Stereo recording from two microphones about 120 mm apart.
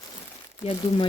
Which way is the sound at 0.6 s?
45° left (ahead or behind).